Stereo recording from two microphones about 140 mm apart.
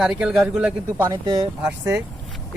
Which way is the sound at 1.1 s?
30° right (ahead or behind).